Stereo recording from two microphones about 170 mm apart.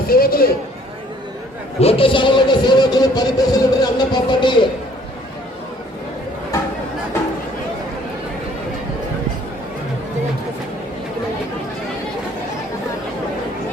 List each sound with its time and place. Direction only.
0.1 s speech: 60° left (ahead or behind)
1.8 s music: 35° left (ahead or behind)